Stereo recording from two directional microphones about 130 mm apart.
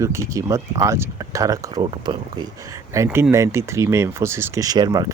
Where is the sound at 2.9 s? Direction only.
20° right (ahead or behind).